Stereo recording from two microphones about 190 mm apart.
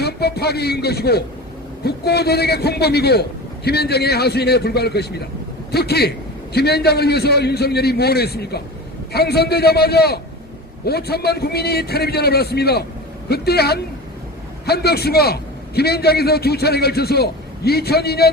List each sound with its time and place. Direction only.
0.0 s a man's voice: 55° left (ahead or behind)